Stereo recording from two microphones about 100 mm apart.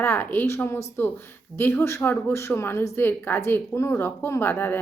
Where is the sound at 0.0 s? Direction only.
20° left (ahead or behind).